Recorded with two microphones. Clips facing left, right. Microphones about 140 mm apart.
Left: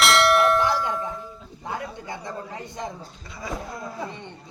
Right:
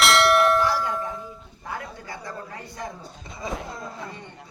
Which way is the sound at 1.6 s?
20° left (ahead or behind).